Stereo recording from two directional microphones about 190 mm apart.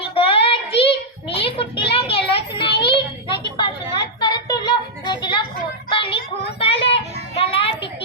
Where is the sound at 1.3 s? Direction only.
30° left (ahead or behind).